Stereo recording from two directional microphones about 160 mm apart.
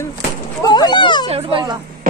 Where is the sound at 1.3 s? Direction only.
35° right (ahead or behind).